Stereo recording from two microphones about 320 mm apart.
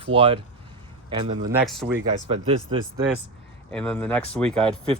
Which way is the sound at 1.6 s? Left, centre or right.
Centre.